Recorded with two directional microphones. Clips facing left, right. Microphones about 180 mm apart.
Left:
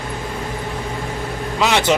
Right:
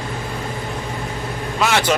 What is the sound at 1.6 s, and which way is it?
Speech, 20° left (ahead or behind).